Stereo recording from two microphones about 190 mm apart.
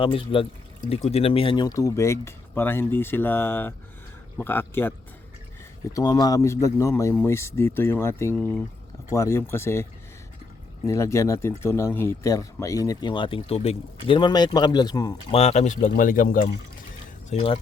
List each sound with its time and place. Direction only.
0.0 s speech: 30° left (ahead or behind); by 9.8 s 15° left (ahead or behind)
10.8 s speech: 15° left (ahead or behind)
15.3 s speech: 35° left (ahead or behind)
17.2 s speech: 30° left (ahead or behind)